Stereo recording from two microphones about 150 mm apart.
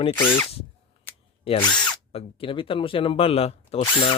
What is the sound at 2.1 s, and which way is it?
Speech, 35° left (ahead or behind).